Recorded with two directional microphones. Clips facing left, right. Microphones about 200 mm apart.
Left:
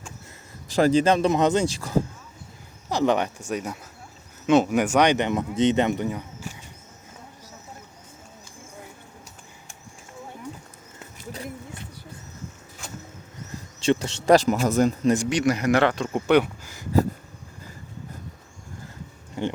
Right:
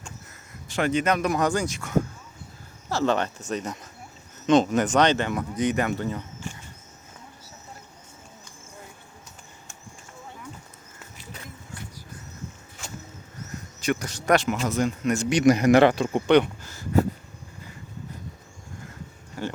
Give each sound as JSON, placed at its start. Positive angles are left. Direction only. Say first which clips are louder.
{"t": 0.7, "sound": "speech", "louder": "left 5 dB", "side_deg": 35}
{"t": 2.9, "sound": "speech", "louder": "left 2 dB", "side_deg": 15}
{"t": 13.5, "sound": "speech", "louder": "left 4 dB", "side_deg": 25}
{"t": 15.3, "sound": "speech", "louder": "right 4 dB", "side_deg": -15}
{"t": 16.1, "sound": "speech", "louder": "right 1 dB", "side_deg": 5}
{"t": 19.4, "sound": "a sound", "louder": "left 4 dB", "side_deg": 20}